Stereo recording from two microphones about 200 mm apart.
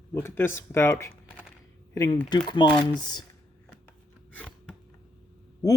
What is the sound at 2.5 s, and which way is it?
Speech, 25° left (ahead or behind).